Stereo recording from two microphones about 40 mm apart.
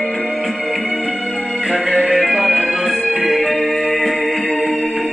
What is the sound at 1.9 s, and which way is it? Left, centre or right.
Music, right.